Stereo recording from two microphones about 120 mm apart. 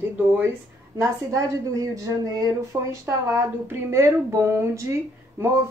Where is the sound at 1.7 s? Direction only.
30° right (ahead or behind).